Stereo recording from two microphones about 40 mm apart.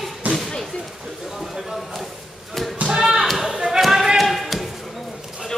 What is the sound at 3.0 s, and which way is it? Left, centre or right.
Basketball bounce, centre.